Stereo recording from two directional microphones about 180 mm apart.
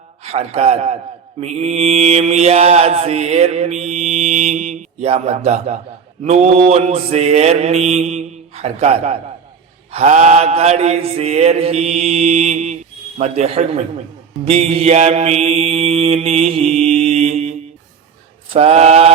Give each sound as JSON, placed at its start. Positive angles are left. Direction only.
{"t": 0.2, "sound": "a man's voice", "side_deg": -35}
{"t": 1.4, "sound": "mantra", "side_deg": -35}